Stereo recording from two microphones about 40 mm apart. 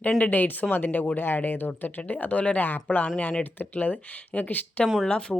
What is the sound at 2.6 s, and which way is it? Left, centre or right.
Speech, left.